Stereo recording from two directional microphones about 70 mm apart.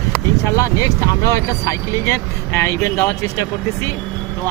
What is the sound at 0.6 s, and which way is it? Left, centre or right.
Speech, left.